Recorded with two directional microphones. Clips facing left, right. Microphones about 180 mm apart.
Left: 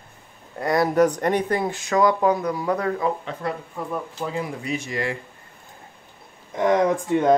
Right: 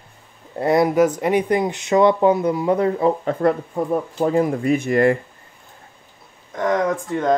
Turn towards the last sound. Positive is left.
turn(degrees=15)  # may be behind; listen again after turning